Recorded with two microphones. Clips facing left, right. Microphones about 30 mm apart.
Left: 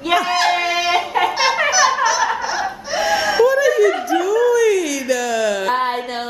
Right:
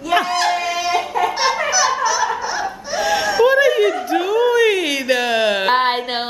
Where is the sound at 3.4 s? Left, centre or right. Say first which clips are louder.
Right 1 dB; right.